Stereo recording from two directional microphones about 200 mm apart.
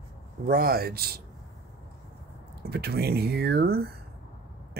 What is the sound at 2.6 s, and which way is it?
Speech, 50° right (ahead or behind).